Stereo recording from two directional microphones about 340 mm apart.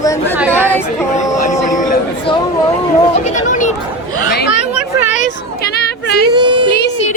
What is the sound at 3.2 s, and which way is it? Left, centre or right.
Speech, left.